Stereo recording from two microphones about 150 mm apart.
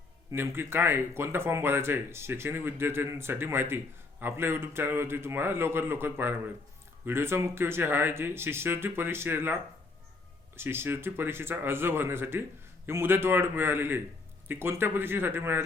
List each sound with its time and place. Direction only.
0.3 s speech: 15° right (ahead or behind)
10.6 s speech: 15° right (ahead or behind)